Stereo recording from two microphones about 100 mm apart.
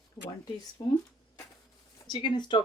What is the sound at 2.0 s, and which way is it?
Speech, 50° left (ahead or behind).